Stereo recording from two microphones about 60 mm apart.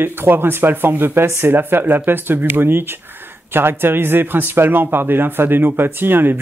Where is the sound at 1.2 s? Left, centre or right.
Right.